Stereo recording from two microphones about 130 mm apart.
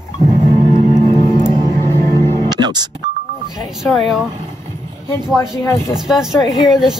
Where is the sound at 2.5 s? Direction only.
30° right (ahead or behind).